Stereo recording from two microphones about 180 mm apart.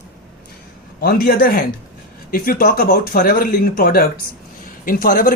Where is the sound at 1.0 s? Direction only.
55° left (ahead or behind).